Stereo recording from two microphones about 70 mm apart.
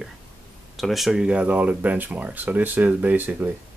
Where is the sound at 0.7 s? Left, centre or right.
Centre.